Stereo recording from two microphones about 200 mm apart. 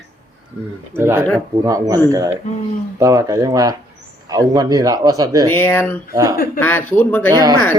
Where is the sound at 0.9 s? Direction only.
15° right (ahead or behind).